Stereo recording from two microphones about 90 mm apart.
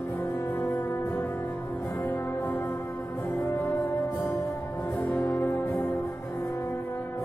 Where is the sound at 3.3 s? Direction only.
30° left (ahead or behind).